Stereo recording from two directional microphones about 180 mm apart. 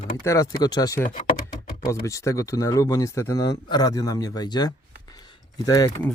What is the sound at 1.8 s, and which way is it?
Speech, 15° left (ahead or behind).